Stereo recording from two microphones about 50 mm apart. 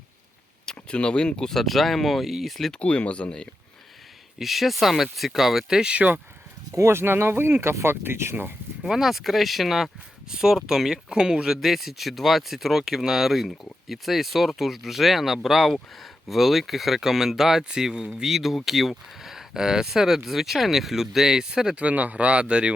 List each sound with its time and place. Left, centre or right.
0.6 s speech: centre
1.5 s speech: centre
2.7 s speech: left
4.4 s speech: centre
5.8 s speech: right
6.7 s speech: right
8.8 s speech: centre
21.8 s speech: right